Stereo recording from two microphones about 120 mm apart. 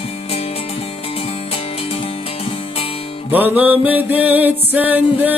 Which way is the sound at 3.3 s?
15° right (ahead or behind).